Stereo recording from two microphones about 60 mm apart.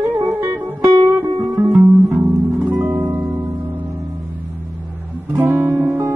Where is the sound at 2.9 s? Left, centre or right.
Right.